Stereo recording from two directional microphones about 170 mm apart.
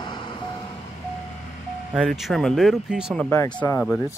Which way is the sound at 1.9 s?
Centre (ahead or behind).